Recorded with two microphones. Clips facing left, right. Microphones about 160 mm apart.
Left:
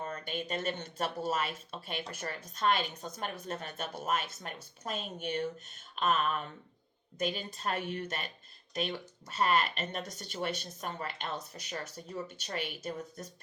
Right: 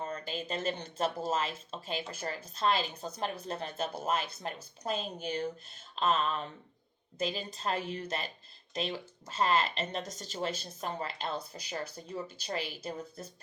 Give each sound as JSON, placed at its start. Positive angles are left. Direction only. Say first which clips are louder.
{"t": 0.0, "sound": "speech", "louder": "even", "side_deg": -30}